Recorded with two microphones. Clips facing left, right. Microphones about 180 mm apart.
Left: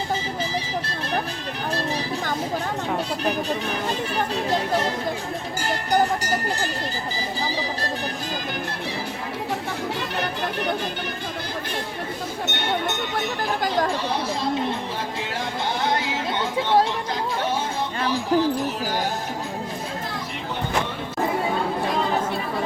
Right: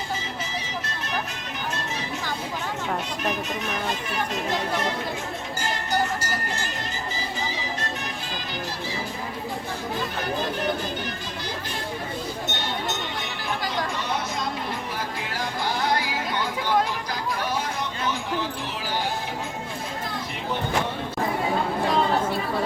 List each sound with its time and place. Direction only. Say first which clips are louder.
3.2 s speech: left 3 dB; 35° left (ahead or behind)
13.1 s chatter: left 6 dB; 50° left (ahead or behind)
15.8 s chatter: left 1 dB; 25° left (ahead or behind)